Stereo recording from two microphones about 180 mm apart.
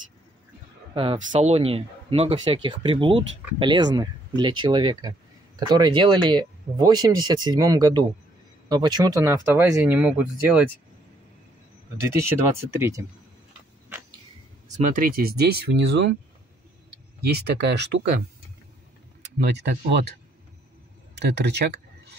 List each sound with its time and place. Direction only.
0.9 s speech: 30° right (ahead or behind); by 10.7 s 10° right (ahead or behind)
12.7 s speech: 15° right (ahead or behind)
13.5 s tick-tock: 10° right (ahead or behind)
14.8 s speech: 50° right (ahead or behind); by 16.2 s 75° right (ahead or behind)
17.2 s speech: 65° right (ahead or behind)
19.5 s speech: 65° right (ahead or behind)
21.2 s speech: 65° right (ahead or behind)